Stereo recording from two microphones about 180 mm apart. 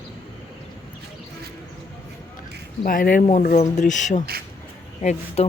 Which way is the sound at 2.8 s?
50° left (ahead or behind).